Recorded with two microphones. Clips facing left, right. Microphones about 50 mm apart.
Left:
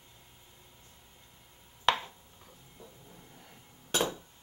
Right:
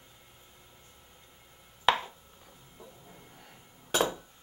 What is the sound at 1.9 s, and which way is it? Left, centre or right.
Chopping, centre.